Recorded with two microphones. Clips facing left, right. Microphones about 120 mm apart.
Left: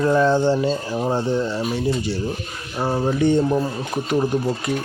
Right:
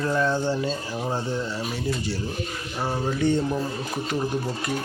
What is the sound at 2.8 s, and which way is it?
Speech, 35° left (ahead or behind).